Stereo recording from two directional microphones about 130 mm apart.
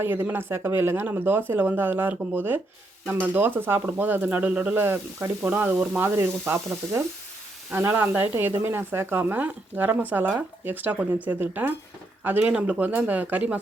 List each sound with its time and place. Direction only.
0.0 s speech: 15° right (ahead or behind)
7.7 s speech: 15° right (ahead or behind)